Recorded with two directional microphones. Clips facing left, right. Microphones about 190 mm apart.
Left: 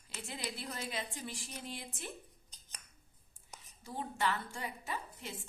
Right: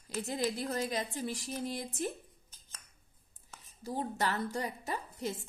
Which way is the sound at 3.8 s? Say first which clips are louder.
Right 2 dB; 40° right (ahead or behind).